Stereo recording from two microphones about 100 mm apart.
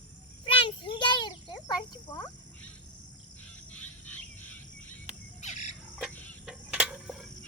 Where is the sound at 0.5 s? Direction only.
60° left (ahead or behind).